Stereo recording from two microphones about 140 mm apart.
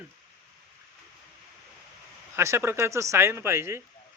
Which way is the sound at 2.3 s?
20° right (ahead or behind).